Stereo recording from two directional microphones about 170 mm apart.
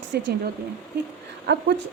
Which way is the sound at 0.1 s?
70° right (ahead or behind).